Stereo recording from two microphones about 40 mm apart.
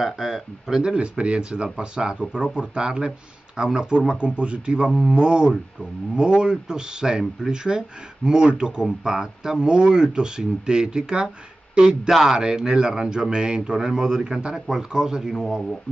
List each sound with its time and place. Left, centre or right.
0.0 s speech: centre
0.9 s speech: right